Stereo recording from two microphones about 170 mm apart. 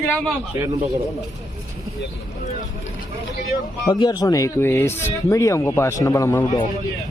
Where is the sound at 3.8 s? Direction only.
25° left (ahead or behind).